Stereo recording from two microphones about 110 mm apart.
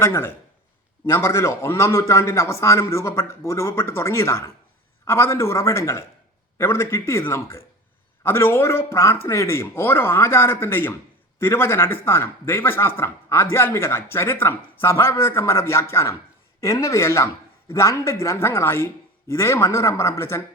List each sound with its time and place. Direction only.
0.0 s a man's voice: 25° left (ahead or behind)